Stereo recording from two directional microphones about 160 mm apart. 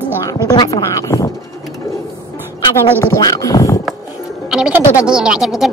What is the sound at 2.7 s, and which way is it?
Speech, 15° left (ahead or behind).